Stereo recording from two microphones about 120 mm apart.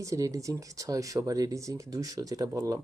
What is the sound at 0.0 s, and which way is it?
Speech, 25° right (ahead or behind).